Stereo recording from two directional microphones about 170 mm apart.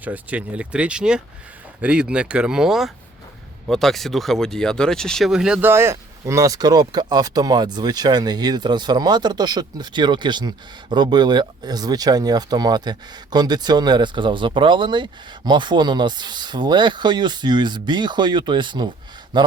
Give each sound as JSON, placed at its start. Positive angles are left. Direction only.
{"t": 0.0, "sound": "speech", "side_deg": -10}